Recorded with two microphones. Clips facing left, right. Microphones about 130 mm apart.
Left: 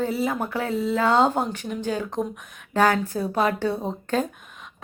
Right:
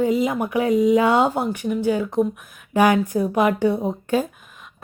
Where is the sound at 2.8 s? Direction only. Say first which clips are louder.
Right 4 dB; 15° right (ahead or behind).